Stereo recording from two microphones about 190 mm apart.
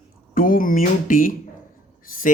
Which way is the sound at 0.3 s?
45° left (ahead or behind).